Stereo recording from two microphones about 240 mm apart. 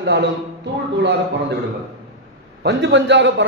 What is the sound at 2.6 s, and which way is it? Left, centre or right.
Speech, right.